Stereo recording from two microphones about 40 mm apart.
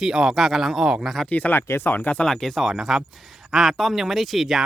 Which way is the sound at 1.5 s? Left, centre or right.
Left.